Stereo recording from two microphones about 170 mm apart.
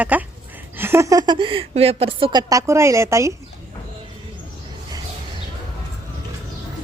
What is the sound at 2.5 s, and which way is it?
Speech, 20° right (ahead or behind).